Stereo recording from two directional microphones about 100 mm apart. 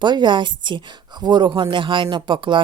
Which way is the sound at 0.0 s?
50° right (ahead or behind).